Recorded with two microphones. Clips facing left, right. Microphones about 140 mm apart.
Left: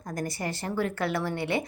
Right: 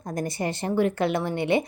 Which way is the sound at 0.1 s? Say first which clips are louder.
Right 4 dB; 20° right (ahead or behind).